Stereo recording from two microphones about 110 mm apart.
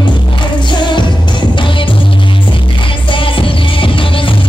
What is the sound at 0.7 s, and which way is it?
Music, 45° left (ahead or behind).